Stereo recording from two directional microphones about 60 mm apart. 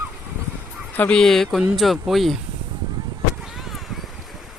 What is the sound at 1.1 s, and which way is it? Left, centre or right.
Speech, centre.